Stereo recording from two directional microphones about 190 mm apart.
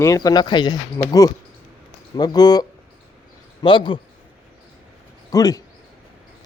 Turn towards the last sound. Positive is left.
turn(degrees=20)  # may be behind; listen again after turning